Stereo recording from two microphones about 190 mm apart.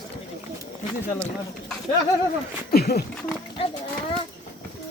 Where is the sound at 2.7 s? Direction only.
55° left (ahead or behind).